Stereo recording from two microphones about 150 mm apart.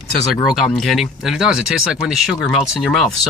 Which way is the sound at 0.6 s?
Centre (ahead or behind).